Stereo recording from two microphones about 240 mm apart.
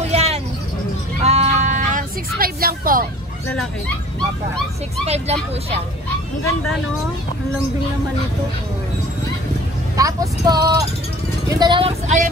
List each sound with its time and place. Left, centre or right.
0.0 s vehicle: right
1.2 s music: right
5.0 s speech: right
9.9 s speech: centre